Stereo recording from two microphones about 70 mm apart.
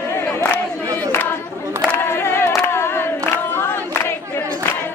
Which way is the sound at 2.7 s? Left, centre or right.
Left.